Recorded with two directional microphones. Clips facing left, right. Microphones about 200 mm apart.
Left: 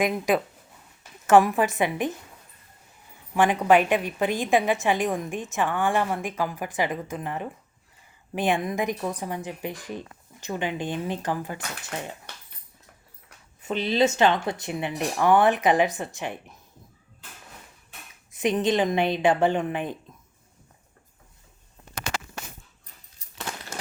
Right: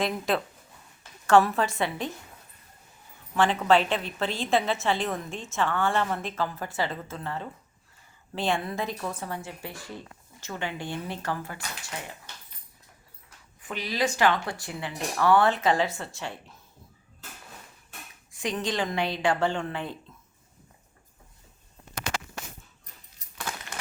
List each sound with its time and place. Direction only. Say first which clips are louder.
0.0 s a woman's voice: left 4 dB; 15° left (ahead or behind)
3.3 s a woman's voice: left 3 dB; 15° left (ahead or behind)
13.6 s speech: left 7 dB; 25° left (ahead or behind)
18.3 s speech: left 7 dB; 20° left (ahead or behind)
23.4 s coin: left 1 dB; 25° left (ahead or behind)